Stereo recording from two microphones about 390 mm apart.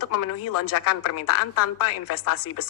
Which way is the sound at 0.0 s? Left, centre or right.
Left.